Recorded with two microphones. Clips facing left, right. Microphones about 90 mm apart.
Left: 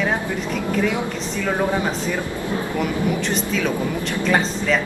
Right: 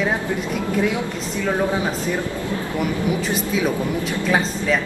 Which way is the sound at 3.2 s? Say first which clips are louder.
Right 1 dB; 5° right (ahead or behind).